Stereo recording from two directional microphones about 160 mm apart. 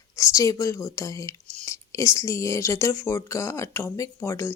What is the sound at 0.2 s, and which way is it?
Speech, 20° left (ahead or behind).